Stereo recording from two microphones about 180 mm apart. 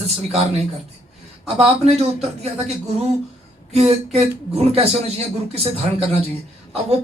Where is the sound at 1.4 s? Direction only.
35° right (ahead or behind).